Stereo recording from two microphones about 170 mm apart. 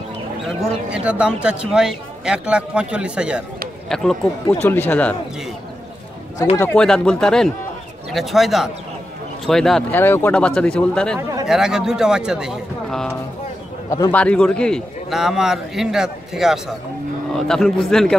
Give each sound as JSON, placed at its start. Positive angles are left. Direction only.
{"t": 0.6, "sound": "speech", "side_deg": -5}
{"t": 6.5, "sound": "speech", "side_deg": 10}
{"t": 13.8, "sound": "a man's voice", "side_deg": 20}
{"t": 14.1, "sound": "speech", "side_deg": 5}